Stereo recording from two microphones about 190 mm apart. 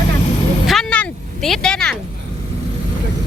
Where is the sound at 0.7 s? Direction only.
5° left (ahead or behind).